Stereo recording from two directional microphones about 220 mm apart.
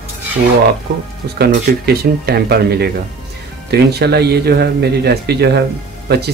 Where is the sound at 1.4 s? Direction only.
45° right (ahead or behind).